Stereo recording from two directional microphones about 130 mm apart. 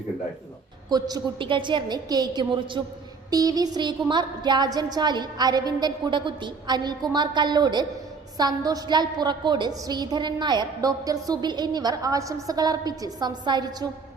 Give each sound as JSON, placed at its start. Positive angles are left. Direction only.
{"t": 0.9, "sound": "a woman's voice", "side_deg": -30}